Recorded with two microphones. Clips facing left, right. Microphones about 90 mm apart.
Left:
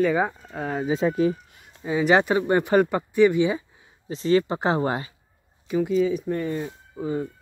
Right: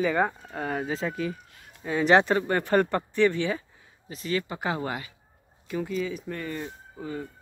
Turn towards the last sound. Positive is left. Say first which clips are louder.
# left 7 dB
turn(degrees=25)  # may be behind; listen again after turning